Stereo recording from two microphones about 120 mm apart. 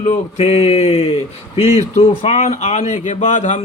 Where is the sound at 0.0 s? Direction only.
75° left (ahead or behind).